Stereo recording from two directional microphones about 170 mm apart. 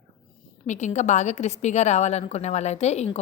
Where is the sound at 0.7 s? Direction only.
45° left (ahead or behind).